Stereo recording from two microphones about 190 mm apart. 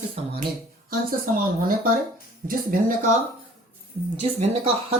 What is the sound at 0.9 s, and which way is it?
Speech, 50° right (ahead or behind).